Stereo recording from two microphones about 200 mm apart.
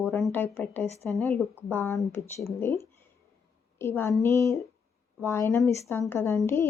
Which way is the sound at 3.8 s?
10° left (ahead or behind).